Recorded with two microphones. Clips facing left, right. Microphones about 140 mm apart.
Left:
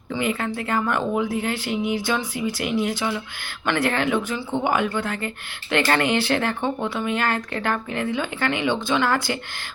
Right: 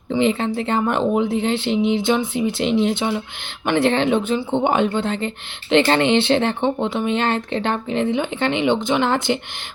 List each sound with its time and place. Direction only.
0.1 s speech: 25° right (ahead or behind)